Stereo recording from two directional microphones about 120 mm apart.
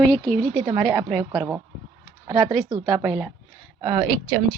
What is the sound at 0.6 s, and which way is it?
Speech, 25° right (ahead or behind).